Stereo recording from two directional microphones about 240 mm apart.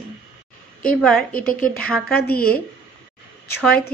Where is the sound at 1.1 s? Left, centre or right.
Left.